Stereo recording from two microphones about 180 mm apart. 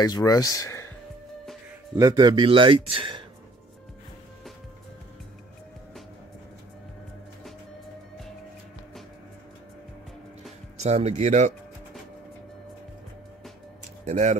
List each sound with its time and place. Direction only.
0.0 s speech: 20° left (ahead or behind)
2.0 s speech: 20° right (ahead or behind)
10.8 s speech: 35° right (ahead or behind)
14.0 s speech: 40° right (ahead or behind)